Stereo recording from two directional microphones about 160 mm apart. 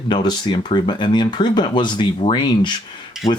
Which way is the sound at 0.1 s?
25° left (ahead or behind).